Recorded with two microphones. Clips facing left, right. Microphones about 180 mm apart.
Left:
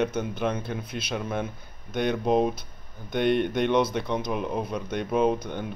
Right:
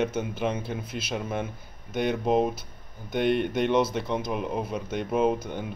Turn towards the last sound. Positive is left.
turn(degrees=-5)  # may be behind; listen again after turning